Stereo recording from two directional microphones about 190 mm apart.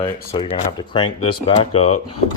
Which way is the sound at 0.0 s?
30° left (ahead or behind).